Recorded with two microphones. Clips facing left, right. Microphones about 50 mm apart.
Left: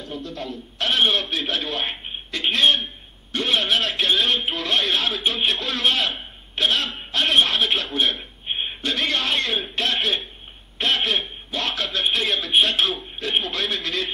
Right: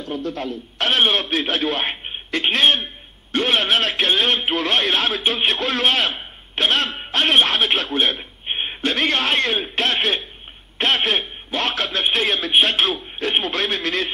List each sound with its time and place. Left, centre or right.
0.0 s a man's voice: right
8.5 s a man's voice: right